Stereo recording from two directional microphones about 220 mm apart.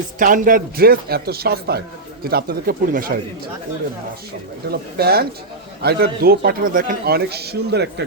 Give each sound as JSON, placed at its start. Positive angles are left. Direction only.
{"t": 0.2, "sound": "a man's voice", "side_deg": -40}
{"t": 4.7, "sound": "a man's voice", "side_deg": -45}